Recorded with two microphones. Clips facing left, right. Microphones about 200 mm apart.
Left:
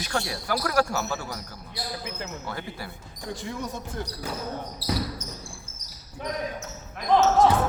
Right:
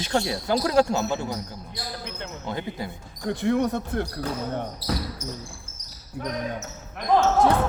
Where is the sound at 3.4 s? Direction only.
60° right (ahead or behind).